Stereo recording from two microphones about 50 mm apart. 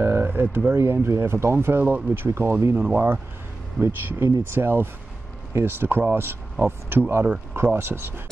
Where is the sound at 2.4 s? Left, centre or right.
Right.